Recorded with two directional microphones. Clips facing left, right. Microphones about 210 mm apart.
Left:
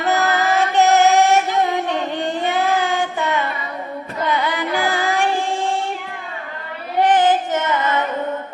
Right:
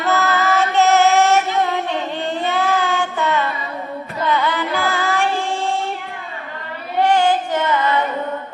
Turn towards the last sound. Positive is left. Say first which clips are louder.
# right 1 dB
turn(degrees=20)  # may be behind; listen again after turning